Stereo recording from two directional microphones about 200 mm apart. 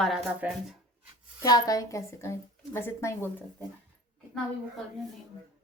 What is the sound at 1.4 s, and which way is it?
A woman's voice, 15° left (ahead or behind).